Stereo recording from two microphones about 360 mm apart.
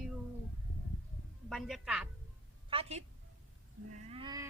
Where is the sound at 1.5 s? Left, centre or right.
Centre.